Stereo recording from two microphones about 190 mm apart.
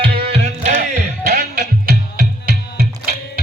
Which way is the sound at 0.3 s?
35° right (ahead or behind).